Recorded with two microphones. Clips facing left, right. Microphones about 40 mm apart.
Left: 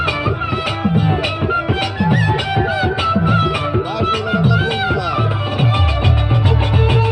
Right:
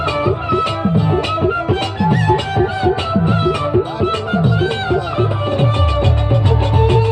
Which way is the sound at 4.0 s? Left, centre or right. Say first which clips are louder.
Even; left.